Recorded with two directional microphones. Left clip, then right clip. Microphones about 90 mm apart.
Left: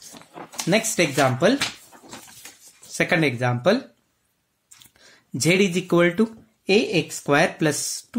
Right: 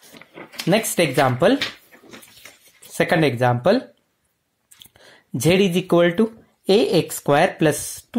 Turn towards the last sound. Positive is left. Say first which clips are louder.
# right 4 dB
turn(degrees=-30)  # may be behind; listen again after turning